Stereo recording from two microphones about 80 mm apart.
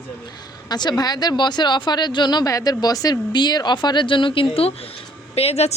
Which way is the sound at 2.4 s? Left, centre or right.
Left.